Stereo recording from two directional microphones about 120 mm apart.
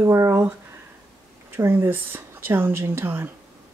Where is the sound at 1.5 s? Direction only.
20° right (ahead or behind).